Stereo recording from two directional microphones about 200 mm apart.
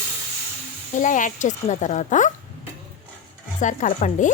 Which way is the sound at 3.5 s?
40° left (ahead or behind).